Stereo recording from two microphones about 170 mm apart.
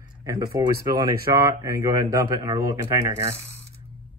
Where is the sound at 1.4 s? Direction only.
15° right (ahead or behind).